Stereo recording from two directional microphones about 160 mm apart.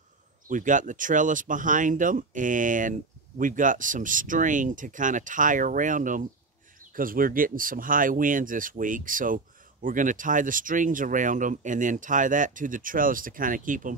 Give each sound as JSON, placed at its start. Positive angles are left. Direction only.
{"t": 0.5, "sound": "speech", "side_deg": -55}